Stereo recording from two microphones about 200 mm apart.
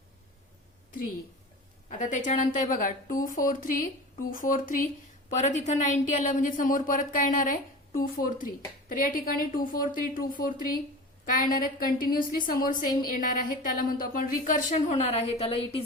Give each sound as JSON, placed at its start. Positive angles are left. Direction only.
{"t": 1.9, "sound": "a woman's voice", "side_deg": 40}